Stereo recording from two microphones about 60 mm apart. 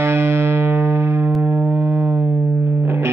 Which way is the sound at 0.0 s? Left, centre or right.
Right.